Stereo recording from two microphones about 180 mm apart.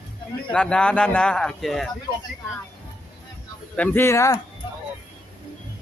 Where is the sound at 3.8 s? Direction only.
15° left (ahead or behind).